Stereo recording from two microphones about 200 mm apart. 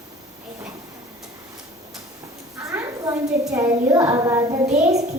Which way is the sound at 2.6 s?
15° right (ahead or behind).